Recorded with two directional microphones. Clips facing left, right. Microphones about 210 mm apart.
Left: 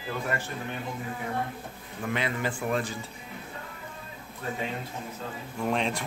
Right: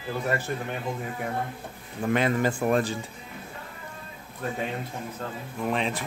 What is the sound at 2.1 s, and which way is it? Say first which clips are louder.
Speech: right 6 dB; 45° right (ahead or behind).